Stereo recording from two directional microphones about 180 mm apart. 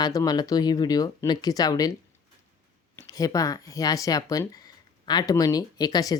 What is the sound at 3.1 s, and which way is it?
Speech, 20° left (ahead or behind).